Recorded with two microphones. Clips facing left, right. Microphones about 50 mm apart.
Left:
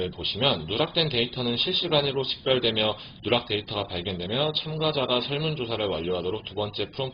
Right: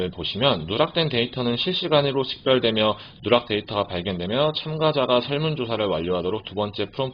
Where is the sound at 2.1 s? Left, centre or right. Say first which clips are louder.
Right 4 dB; centre.